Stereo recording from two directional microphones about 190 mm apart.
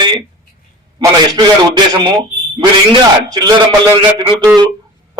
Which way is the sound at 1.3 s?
25° right (ahead or behind).